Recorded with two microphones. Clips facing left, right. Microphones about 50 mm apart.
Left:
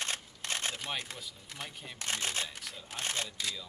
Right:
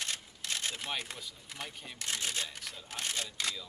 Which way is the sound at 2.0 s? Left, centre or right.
Left.